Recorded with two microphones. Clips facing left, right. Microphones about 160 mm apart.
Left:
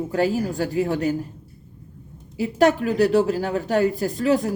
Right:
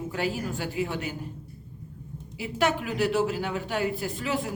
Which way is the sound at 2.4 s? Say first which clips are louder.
Left 8 dB; 40° left (ahead or behind).